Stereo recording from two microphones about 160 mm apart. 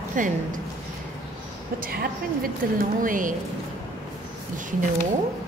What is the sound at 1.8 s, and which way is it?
Speech, 65° right (ahead or behind).